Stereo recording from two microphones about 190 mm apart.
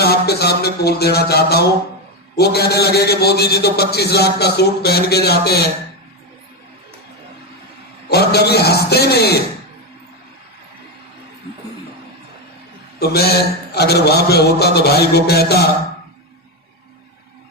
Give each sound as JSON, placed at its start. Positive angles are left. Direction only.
{"t": 0.0, "sound": "a man's voice", "side_deg": 60}
{"t": 8.1, "sound": "a man's voice", "side_deg": 60}
{"t": 13.0, "sound": "a man's voice", "side_deg": 55}